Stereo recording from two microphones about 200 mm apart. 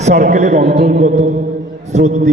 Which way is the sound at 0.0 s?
35° right (ahead or behind).